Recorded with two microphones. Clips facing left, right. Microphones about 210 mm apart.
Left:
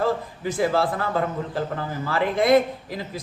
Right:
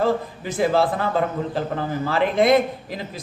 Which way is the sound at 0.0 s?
25° right (ahead or behind).